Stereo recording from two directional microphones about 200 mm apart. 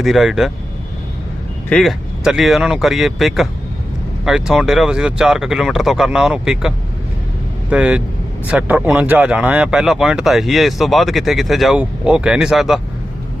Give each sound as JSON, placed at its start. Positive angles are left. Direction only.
{"t": 0.0, "sound": "speech", "side_deg": 0}
{"t": 1.7, "sound": "speech", "side_deg": 0}